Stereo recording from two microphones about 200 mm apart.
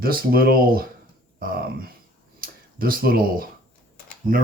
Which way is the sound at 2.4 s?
45° right (ahead or behind).